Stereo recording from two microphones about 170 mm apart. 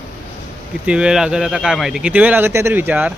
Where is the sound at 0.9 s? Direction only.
5° right (ahead or behind).